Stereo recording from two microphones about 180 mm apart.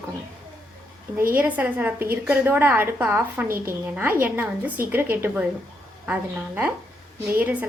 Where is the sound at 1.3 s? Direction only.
10° right (ahead or behind).